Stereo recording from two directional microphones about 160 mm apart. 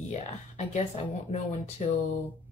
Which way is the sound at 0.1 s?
45° left (ahead or behind).